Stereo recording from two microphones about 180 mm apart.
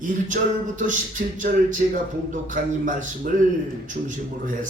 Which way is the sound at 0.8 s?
45° right (ahead or behind).